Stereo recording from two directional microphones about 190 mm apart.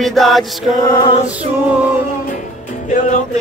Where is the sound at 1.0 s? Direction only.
25° left (ahead or behind).